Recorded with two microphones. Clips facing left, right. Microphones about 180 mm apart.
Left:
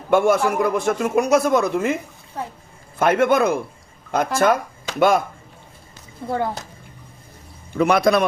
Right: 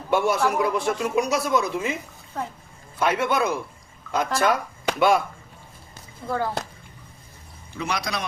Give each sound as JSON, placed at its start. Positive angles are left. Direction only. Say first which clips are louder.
{"t": 0.1, "sound": "speech", "louder": "left 5 dB", "side_deg": 50}
{"t": 3.0, "sound": "speech", "louder": "left 6 dB", "side_deg": 50}
{"t": 6.2, "sound": "speech", "louder": "left 3 dB", "side_deg": 25}
{"t": 7.7, "sound": "speech", "louder": "left 12 dB", "side_deg": 55}